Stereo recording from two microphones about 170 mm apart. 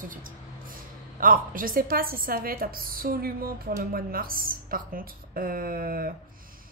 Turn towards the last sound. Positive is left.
turn(degrees=-60)  # may be behind; listen again after turning